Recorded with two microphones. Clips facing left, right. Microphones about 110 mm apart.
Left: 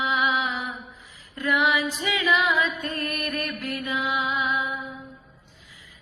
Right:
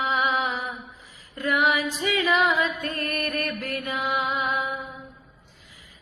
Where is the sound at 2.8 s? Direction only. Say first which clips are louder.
Right 1 dB; 45° right (ahead or behind).